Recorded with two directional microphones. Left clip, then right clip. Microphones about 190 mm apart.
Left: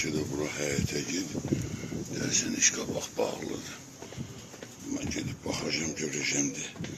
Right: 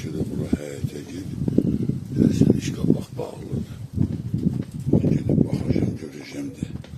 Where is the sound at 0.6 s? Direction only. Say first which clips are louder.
Left 2 dB; 10° right (ahead or behind).